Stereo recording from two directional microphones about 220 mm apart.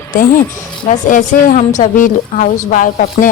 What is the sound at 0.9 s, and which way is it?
A woman's voice, 35° left (ahead or behind).